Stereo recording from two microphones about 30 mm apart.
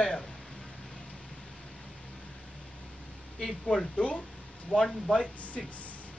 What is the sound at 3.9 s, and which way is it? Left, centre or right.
Speech, left.